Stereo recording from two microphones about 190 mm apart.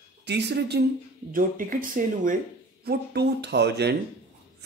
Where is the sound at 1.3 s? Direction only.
45° right (ahead or behind).